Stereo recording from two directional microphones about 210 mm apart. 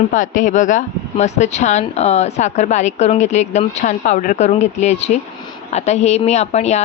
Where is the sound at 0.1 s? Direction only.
35° left (ahead or behind).